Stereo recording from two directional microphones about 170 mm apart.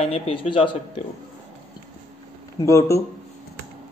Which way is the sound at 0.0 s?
35° left (ahead or behind).